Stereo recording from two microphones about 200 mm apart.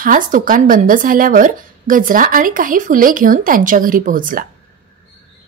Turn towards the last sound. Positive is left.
turn(degrees=-45)  # may be behind; listen again after turning